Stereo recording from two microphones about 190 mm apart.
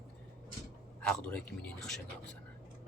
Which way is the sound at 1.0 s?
5° left (ahead or behind).